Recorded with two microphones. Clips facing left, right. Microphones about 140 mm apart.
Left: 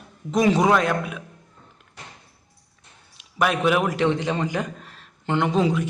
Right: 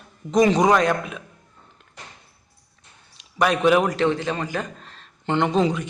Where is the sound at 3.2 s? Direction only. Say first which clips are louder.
Right 2 dB; 5° left (ahead or behind).